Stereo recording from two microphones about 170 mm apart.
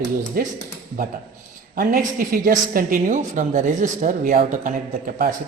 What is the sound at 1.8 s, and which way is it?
A woman's voice, 60° right (ahead or behind).